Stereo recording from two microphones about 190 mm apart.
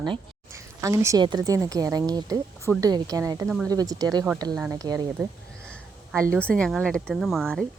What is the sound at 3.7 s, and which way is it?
A woman's voice, 20° right (ahead or behind).